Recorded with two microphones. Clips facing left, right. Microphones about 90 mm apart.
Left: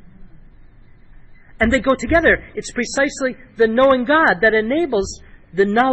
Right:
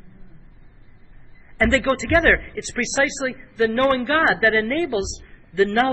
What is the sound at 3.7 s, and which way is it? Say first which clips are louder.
A man's voice: left 6 dB; 35° left (ahead or behind).